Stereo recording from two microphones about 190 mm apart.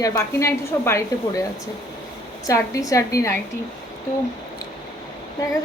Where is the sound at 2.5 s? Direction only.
20° left (ahead or behind).